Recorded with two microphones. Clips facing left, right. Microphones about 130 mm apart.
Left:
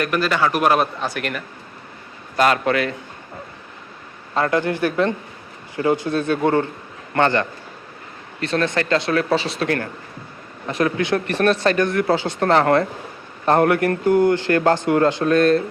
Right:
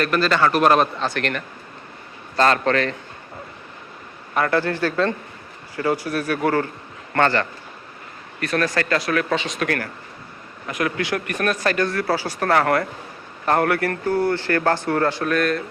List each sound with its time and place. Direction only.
0.0 s speech: 15° left (ahead or behind)
4.4 s speech: 20° left (ahead or behind)